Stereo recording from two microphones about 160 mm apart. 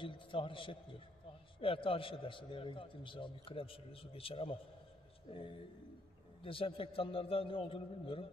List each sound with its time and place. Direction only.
0.0 s a man's voice: 30° left (ahead or behind)